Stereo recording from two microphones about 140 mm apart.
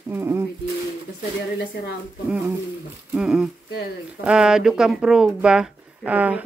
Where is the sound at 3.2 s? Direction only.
5° right (ahead or behind).